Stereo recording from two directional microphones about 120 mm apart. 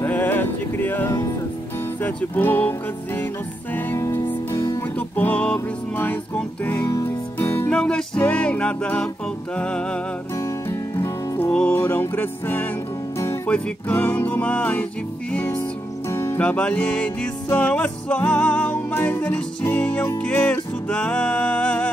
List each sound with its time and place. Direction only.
0.0 s music: 15° left (ahead or behind)
3.7 s music: 20° left (ahead or behind)
7.7 s music: 5° left (ahead or behind)
10.7 s music: 20° left (ahead or behind)
16.1 s music: 25° left (ahead or behind)
16.3 s music: 10° left (ahead or behind)